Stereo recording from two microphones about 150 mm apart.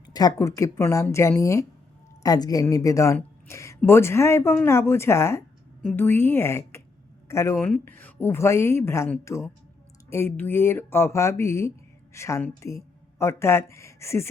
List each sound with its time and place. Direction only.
0.0 s speech: 25° left (ahead or behind)
3.2 s a sound: 20° left (ahead or behind)
3.8 s a woman's voice: 15° left (ahead or behind)